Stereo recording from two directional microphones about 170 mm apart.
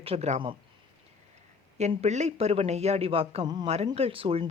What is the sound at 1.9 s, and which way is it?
A man's voice, 40° right (ahead or behind).